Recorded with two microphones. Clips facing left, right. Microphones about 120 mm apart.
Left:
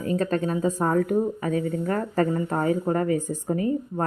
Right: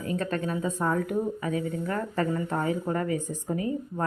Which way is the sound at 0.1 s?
35° left (ahead or behind).